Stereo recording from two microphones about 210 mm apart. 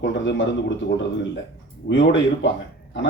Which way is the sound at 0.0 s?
60° left (ahead or behind).